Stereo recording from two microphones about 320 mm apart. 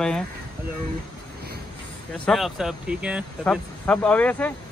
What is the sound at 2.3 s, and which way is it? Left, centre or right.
Speech, centre.